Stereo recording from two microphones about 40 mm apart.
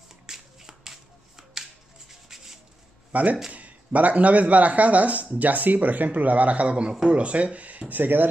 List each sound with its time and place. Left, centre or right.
0.3 s finger snapping: centre
3.1 s speech: right
7.9 s speech: right